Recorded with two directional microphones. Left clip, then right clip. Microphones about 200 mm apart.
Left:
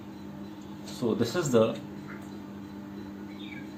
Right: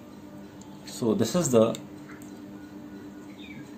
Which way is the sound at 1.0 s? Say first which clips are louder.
Right 3 dB; 45° right (ahead or behind).